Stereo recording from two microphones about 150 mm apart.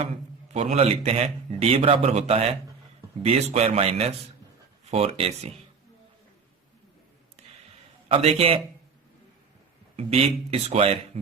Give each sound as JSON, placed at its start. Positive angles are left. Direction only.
{"t": 0.0, "sound": "a man's voice", "side_deg": -50}
{"t": 8.0, "sound": "a man's voice", "side_deg": -40}
{"t": 9.9, "sound": "a man's voice", "side_deg": -45}